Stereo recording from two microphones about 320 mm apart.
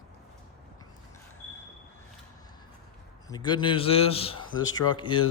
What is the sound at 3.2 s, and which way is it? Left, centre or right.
A man's voice, centre.